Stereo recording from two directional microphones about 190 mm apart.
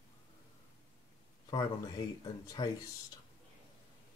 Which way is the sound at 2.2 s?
20° left (ahead or behind).